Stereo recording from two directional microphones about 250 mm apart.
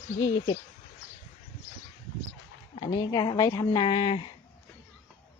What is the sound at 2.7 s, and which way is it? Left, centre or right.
Speech, centre.